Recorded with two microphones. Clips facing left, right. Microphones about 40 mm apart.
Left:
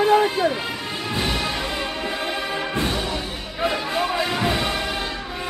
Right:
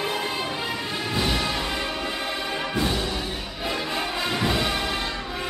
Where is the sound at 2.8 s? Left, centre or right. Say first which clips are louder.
Left 1 dB; centre.